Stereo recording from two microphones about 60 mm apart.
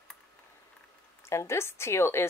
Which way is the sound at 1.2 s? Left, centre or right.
Left.